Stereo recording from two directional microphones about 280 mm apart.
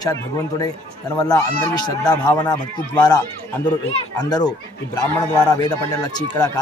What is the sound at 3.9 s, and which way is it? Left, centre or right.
Speech, centre.